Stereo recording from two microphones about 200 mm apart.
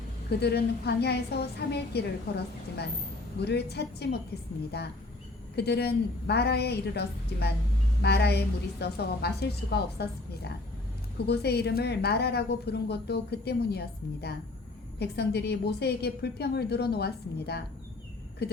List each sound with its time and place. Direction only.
0.3 s a woman's voice: 55° left (ahead or behind)